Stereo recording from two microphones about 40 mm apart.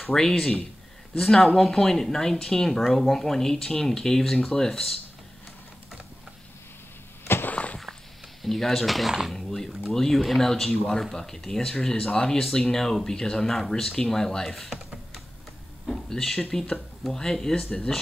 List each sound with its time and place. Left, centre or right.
0.0 s speech: centre
7.5 s a sound: left
8.4 s speech: centre
16.1 s speech: centre